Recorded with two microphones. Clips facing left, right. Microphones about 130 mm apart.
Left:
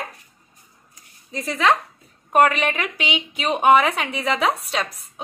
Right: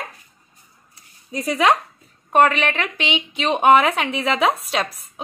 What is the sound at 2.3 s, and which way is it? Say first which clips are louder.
A woman's voice: right 1 dB; 10° left (ahead or behind).